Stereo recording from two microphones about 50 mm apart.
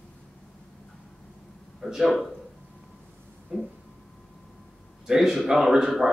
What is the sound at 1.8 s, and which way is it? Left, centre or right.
Speech, centre.